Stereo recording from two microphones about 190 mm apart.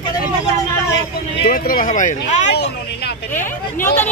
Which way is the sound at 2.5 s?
60° left (ahead or behind).